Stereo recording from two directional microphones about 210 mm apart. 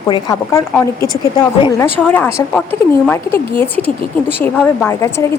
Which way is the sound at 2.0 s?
5° left (ahead or behind).